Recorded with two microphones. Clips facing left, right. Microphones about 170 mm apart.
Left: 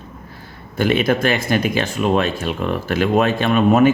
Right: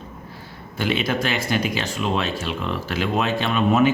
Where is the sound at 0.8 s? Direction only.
50° left (ahead or behind).